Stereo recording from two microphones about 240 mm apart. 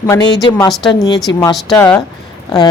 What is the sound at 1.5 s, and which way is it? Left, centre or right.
Speech, centre.